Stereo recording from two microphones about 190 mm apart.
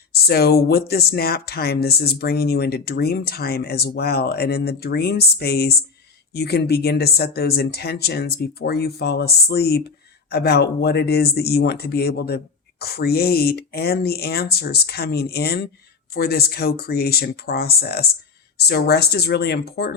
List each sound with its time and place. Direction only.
0.1 s speech: 55° left (ahead or behind)